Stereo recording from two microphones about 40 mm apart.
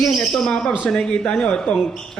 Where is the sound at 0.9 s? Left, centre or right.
Left.